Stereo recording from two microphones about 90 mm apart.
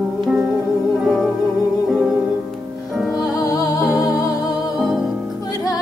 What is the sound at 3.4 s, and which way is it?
Music, 40° left (ahead or behind).